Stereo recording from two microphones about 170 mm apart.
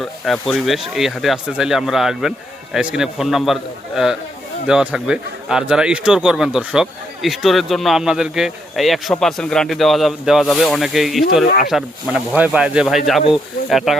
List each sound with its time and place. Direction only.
0.0 s a man's voice: centre (ahead or behind)